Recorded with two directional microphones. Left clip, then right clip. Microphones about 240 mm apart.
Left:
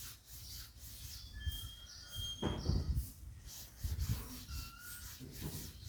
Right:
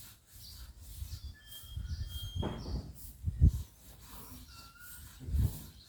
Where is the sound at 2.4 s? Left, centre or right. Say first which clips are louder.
Right 1 dB; centre.